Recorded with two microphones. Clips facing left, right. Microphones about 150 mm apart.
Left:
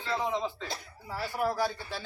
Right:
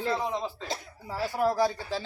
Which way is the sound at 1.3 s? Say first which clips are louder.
Right 4 dB; 15° right (ahead or behind).